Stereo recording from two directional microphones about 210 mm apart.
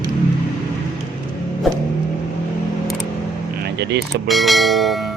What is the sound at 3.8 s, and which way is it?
Vehicle, 55° right (ahead or behind).